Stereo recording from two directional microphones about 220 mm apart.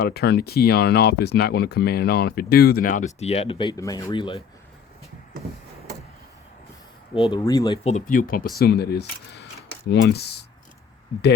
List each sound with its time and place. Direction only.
0.0 s speech: 45° left (ahead or behind); by 4.4 s 20° left (ahead or behind)
7.1 s speech: 25° left (ahead or behind)
7.9 s speech: 35° left (ahead or behind)